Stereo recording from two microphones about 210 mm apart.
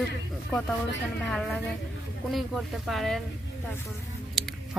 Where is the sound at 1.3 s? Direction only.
Centre (ahead or behind).